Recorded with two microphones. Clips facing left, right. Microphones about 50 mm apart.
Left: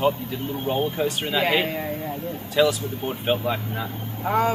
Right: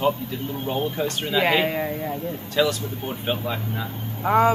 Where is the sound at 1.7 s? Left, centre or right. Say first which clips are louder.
Right 2 dB; right.